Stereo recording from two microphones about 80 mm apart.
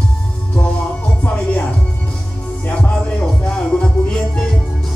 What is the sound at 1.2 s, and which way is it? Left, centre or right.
Music, centre.